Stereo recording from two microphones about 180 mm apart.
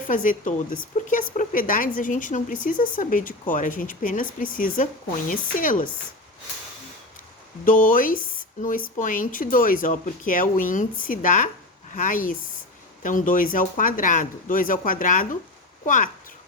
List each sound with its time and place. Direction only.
0.1 s speech: 45° left (ahead or behind)
7.6 s speech: 50° left (ahead or behind)